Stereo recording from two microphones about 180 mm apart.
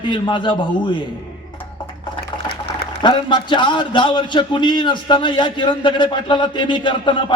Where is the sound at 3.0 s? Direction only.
25° left (ahead or behind).